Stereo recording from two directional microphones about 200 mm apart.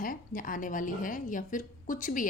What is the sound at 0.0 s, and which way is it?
A woman's voice, 45° left (ahead or behind).